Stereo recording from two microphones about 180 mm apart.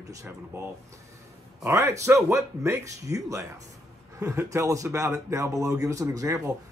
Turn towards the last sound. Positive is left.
turn(degrees=-15)  # may be behind; listen again after turning